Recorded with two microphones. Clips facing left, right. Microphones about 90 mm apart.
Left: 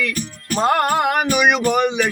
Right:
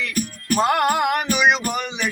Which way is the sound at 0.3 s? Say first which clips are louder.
Left 1 dB; 35° left (ahead or behind).